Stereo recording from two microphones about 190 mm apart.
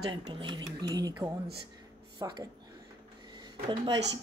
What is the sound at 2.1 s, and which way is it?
Speech, 25° right (ahead or behind).